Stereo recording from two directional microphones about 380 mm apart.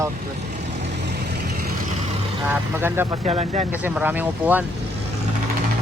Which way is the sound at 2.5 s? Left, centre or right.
Centre.